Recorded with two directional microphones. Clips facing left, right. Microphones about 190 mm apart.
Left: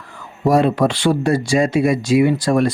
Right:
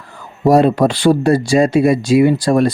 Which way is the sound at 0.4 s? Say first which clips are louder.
Right 4 dB; 35° right (ahead or behind).